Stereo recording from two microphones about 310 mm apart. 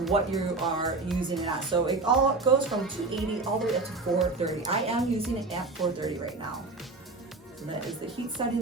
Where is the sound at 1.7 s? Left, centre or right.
Centre.